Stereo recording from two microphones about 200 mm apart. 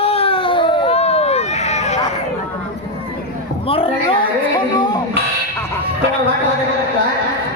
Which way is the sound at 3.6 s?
25° left (ahead or behind).